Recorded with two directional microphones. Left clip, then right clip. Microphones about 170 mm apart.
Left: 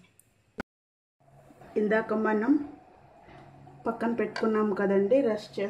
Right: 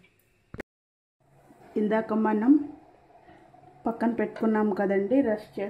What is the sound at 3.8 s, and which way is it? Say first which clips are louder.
A woman's voice: right 1 dB; 55° right (ahead or behind).